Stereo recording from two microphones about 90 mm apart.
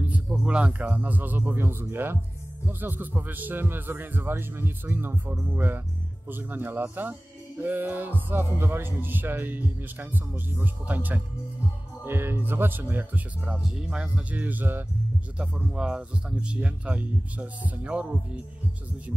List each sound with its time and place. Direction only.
0.0 s speech: 15° right (ahead or behind)
13.5 s speech: 10° right (ahead or behind)
15.3 s speech: 10° right (ahead or behind)